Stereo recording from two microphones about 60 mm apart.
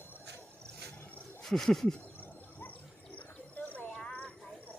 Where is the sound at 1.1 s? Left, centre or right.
Left.